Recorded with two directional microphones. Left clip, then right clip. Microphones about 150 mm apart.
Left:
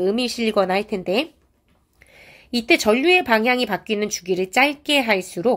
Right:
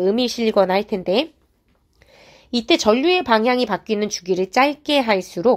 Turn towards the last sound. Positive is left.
turn(degrees=-35)  # may be behind; listen again after turning